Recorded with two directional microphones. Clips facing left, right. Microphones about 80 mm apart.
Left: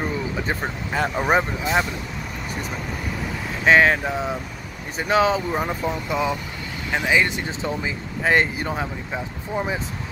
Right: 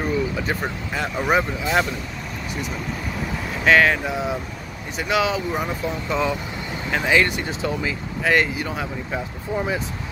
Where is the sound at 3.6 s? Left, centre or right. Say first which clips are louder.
Left 1 dB; left.